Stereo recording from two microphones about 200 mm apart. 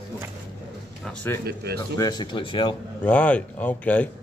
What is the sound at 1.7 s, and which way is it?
Speech, 20° left (ahead or behind).